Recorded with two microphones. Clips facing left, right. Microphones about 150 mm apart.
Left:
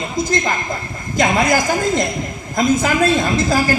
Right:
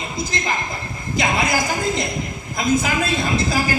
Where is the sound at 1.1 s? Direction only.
45° left (ahead or behind).